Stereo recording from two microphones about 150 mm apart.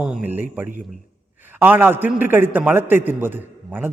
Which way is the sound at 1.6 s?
10° right (ahead or behind).